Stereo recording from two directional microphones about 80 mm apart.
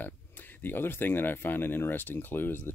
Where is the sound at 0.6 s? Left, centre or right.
Left.